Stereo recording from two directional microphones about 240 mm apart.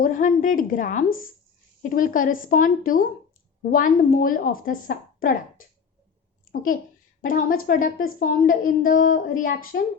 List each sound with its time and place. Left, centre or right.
0.0 s a woman's voice: left
6.4 s a sound: left
7.2 s a woman's voice: left